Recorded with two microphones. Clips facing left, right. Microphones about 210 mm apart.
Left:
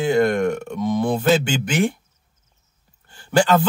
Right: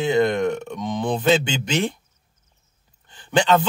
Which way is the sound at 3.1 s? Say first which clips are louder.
Left 1 dB; 20° right (ahead or behind).